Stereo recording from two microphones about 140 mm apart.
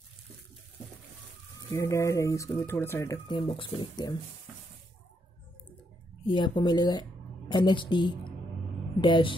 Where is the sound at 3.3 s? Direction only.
35° left (ahead or behind).